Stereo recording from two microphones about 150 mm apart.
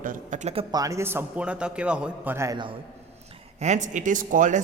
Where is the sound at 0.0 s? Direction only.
60° right (ahead or behind).